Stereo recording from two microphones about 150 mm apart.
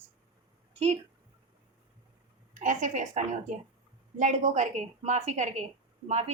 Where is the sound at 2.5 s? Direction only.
60° right (ahead or behind).